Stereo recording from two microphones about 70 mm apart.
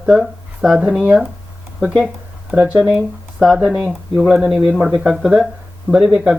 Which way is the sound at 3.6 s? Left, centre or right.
Centre.